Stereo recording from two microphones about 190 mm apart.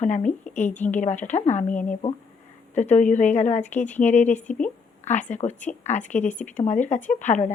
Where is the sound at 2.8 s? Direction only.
40° left (ahead or behind).